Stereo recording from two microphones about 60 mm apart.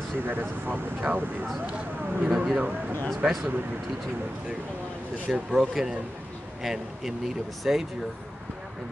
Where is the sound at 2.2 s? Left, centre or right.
Centre.